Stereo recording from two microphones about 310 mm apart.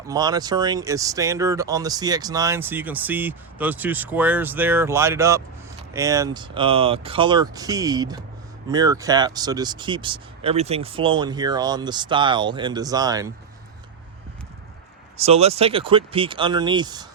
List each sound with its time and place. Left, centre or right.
0.1 s speech: centre
15.2 s speech: centre